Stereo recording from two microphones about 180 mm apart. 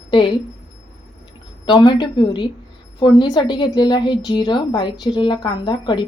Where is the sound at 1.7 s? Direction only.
25° left (ahead or behind).